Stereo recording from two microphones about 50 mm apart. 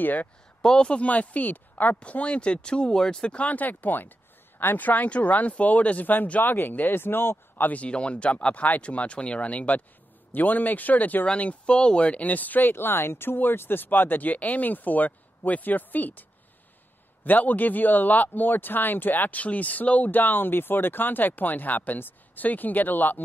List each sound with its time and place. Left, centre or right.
0.0 s speech: left
0.6 s speech: centre; by 2.0 s left
2.0 s speech: left
7.7 s speech: left
11.3 s speech: left